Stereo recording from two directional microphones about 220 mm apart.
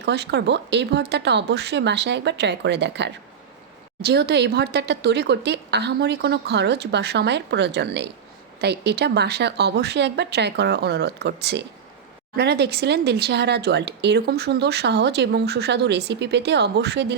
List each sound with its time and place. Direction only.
0.0 s speech: 50° right (ahead or behind)